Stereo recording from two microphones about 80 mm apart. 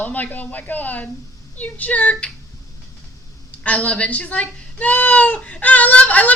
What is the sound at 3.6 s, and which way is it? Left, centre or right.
Speech, centre.